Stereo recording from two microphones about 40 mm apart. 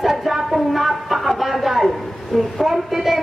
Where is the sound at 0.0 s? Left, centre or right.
Centre.